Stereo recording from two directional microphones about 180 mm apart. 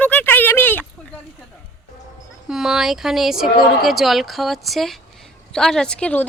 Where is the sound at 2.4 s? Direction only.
Centre (ahead or behind).